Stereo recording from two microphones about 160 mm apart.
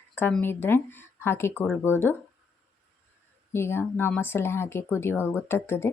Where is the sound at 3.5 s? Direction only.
15° left (ahead or behind).